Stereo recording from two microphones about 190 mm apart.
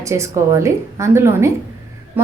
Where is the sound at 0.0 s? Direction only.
15° right (ahead or behind).